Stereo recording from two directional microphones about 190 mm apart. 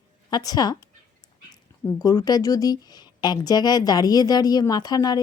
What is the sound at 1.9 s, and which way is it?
Speech, 20° left (ahead or behind).